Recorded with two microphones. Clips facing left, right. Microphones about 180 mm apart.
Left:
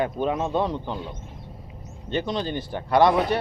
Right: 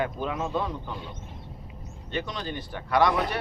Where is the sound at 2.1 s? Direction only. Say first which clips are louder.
Left 6 dB; 30° left (ahead or behind).